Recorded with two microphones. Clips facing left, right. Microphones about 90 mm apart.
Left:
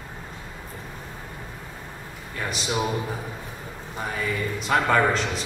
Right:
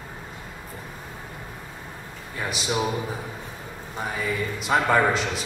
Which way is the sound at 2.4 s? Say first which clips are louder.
Right 1 dB; 5° right (ahead or behind).